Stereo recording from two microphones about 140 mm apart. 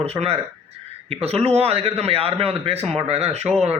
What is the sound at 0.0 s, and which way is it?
Speech, 45° right (ahead or behind).